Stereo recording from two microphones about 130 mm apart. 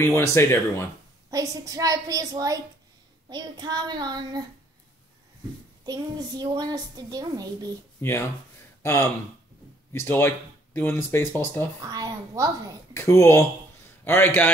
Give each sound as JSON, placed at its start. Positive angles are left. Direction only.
{"t": 0.0, "sound": "speech", "side_deg": 20}
{"t": 1.3, "sound": "a woman's voice", "side_deg": -25}
{"t": 5.9, "sound": "a woman's voice", "side_deg": -30}
{"t": 8.0, "sound": "speech", "side_deg": 15}
{"t": 11.8, "sound": "a woman's voice", "side_deg": -30}
{"t": 12.9, "sound": "speech", "side_deg": 20}